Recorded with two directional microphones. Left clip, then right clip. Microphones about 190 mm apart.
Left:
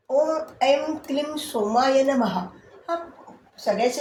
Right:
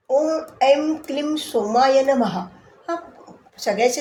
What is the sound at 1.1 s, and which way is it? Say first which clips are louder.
Speech: right 2 dB; 45° right (ahead or behind).